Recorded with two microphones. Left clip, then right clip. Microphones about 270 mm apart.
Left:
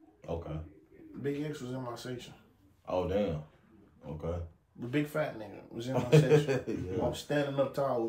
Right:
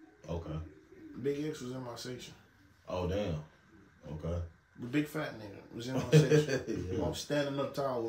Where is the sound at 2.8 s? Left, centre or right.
Left.